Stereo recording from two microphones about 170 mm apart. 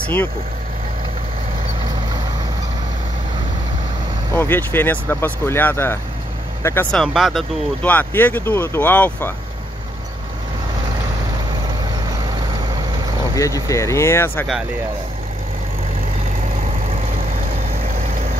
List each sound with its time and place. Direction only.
0.0 s speech: 10° left (ahead or behind)
4.3 s speech: 10° left (ahead or behind)
7.0 s speech: centre (ahead or behind)
7.8 s speech: 10° left (ahead or behind)
12.3 s vehicle: 25° right (ahead or behind)
13.7 s speech: 15° left (ahead or behind)